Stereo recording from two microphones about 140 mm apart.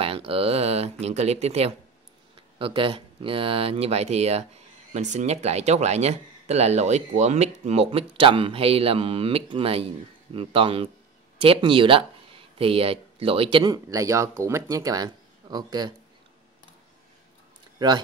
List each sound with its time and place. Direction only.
0.0 s speech: 40° right (ahead or behind)
2.6 s speech: 40° right (ahead or behind)
13.8 s speech: 25° right (ahead or behind)
17.7 s speech: 30° right (ahead or behind)